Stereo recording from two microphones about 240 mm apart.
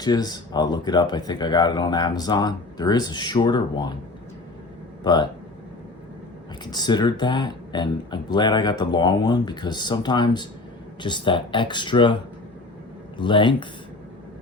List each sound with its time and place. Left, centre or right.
0.0 s speech: centre
5.0 s speech: centre
6.7 s speech: centre